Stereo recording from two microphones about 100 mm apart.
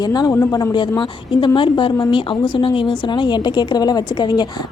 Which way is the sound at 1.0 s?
55° left (ahead or behind).